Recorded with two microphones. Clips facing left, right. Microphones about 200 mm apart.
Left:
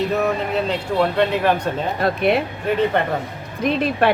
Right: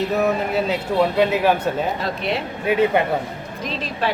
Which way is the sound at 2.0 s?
55° left (ahead or behind).